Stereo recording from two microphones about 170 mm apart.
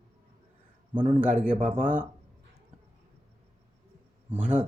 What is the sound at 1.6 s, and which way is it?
Speech, 45° right (ahead or behind).